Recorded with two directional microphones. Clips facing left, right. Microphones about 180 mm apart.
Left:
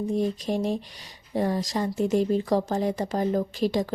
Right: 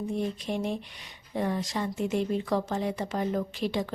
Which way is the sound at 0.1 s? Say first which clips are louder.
Left 6 dB; 40° left (ahead or behind).